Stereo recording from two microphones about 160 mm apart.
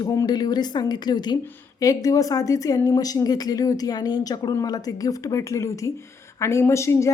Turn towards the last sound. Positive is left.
turn(degrees=15)  # may be behind; listen again after turning